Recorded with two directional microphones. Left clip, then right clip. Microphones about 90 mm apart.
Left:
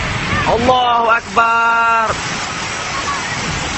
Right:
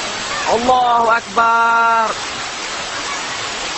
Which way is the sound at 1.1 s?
30° left (ahead or behind).